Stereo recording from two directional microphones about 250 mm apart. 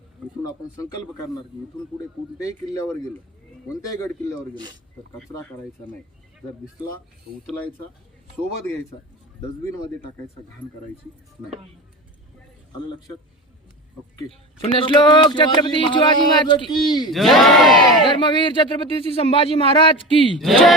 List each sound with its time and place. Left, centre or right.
2.4 s speech: centre
14.6 s speech: left
17.1 s speech: centre
18.0 s speech: centre
20.4 s speech: centre